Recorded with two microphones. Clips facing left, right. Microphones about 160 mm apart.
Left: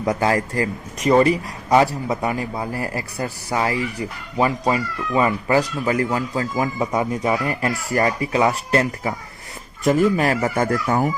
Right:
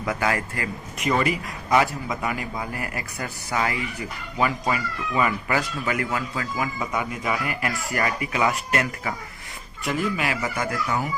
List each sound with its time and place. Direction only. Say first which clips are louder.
0.0 s speech: left 5 dB; 30° left (ahead or behind)
9.8 s speech: left 9 dB; 40° left (ahead or behind)